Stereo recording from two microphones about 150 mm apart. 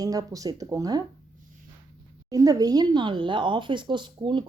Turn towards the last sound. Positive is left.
turn(degrees=-30)  # may be behind; listen again after turning